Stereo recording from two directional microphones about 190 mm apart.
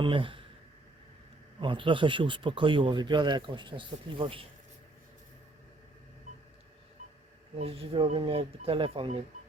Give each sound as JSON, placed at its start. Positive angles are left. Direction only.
{"t": 0.0, "sound": "speech", "side_deg": -25}
{"t": 1.6, "sound": "speech", "side_deg": -25}
{"t": 7.6, "sound": "speech", "side_deg": -30}